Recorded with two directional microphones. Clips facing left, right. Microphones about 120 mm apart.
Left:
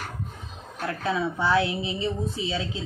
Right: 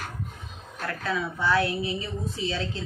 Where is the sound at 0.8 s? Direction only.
25° left (ahead or behind).